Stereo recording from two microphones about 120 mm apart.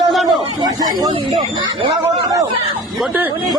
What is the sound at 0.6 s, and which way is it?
Snake, 30° right (ahead or behind).